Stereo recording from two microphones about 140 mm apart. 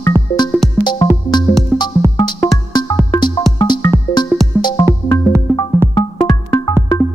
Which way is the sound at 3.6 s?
30° left (ahead or behind).